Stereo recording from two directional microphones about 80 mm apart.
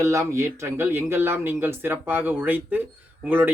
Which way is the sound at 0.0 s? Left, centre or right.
Right.